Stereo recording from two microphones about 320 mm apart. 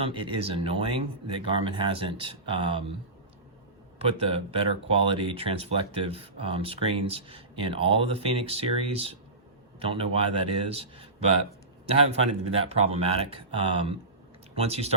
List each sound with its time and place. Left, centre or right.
0.0 s speech: centre
3.9 s speech: centre
12.1 s speech: centre